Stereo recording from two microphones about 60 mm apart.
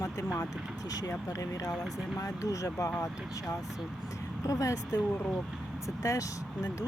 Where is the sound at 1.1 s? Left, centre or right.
Left.